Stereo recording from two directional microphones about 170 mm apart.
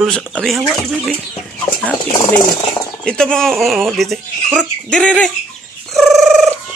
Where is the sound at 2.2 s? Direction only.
25° left (ahead or behind).